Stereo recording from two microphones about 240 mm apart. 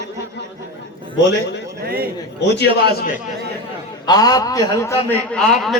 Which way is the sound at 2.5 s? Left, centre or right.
Left.